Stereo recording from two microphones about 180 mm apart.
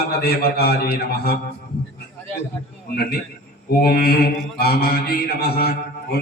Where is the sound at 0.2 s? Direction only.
60° left (ahead or behind).